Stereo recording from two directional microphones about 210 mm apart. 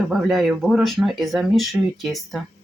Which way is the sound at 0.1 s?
Centre (ahead or behind).